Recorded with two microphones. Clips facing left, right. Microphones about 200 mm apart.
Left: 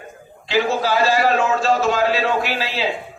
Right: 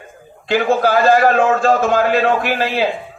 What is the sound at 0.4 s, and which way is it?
A man's voice, 55° right (ahead or behind).